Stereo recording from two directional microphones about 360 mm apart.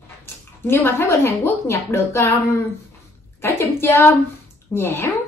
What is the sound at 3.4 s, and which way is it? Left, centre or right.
Speech, centre.